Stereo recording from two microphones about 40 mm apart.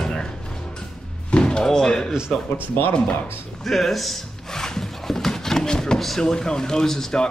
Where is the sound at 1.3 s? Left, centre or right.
Left.